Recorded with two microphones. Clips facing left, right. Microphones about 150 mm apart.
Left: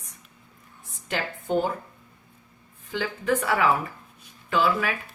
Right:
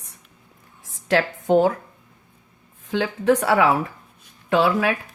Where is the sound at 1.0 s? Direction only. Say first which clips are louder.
Right 9 dB; 90° right.